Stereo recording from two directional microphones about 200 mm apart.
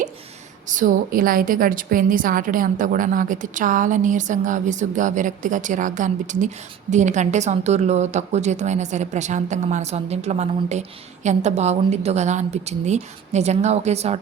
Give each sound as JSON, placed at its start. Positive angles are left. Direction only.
{"t": 0.7, "sound": "a woman's voice", "side_deg": -40}